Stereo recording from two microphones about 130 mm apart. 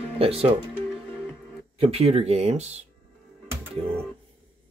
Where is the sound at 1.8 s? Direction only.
50° right (ahead or behind).